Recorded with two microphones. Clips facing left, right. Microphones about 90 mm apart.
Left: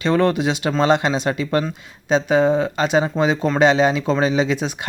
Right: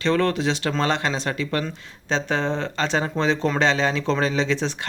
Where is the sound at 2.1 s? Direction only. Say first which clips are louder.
Left 8 dB; 10° left (ahead or behind).